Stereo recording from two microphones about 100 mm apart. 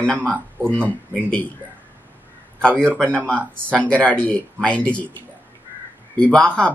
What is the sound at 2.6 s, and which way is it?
Speech, 10° left (ahead or behind).